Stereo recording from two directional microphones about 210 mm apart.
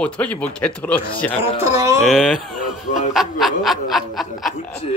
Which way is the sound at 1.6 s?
15° right (ahead or behind).